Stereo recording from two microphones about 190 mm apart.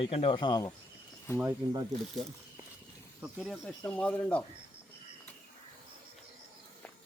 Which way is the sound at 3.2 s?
Centre (ahead or behind).